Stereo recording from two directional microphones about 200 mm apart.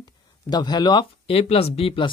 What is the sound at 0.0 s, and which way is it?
Speech, 20° left (ahead or behind).